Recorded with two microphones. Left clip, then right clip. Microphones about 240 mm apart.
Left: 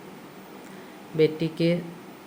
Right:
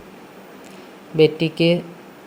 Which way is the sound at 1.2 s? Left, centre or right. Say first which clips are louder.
Right 7 dB; centre.